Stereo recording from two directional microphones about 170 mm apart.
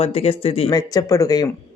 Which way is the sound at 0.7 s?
20° left (ahead or behind).